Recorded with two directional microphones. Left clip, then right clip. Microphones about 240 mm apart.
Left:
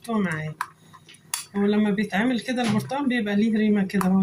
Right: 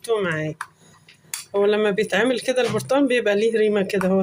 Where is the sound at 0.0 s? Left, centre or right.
Right.